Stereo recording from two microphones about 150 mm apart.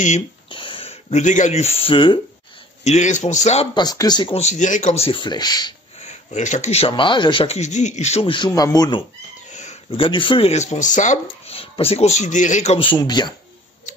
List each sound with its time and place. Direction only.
0.5 s speech: 35° left (ahead or behind)
2.8 s a man's voice: 50° left (ahead or behind)
3.7 s speech: 25° left (ahead or behind)
4.4 s speech: 50° left (ahead or behind); by 5.8 s 30° left (ahead or behind)
6.0 s speech: 50° left (ahead or behind)
6.9 s speech: 30° left (ahead or behind)
8.5 s speech: 25° left (ahead or behind)
9.5 s a sound: 50° left (ahead or behind)
9.8 s speech: 35° left (ahead or behind); by 11.5 s 55° left (ahead or behind)
11.5 s speech: 40° left (ahead or behind)
12.7 s speech: 30° left (ahead or behind)